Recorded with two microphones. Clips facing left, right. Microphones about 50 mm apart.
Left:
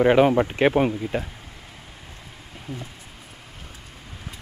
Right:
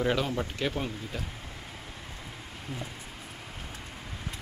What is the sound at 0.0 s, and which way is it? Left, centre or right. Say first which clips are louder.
Speech: left 12 dB; left.